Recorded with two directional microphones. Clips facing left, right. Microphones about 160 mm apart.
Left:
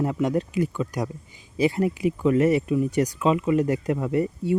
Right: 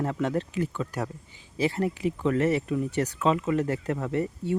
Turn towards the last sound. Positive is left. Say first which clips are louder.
# left 4 dB
turn(degrees=10)  # may be behind; listen again after turning